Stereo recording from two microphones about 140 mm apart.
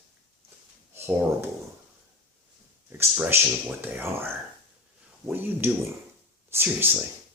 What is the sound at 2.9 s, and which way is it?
Speech, 15° right (ahead or behind).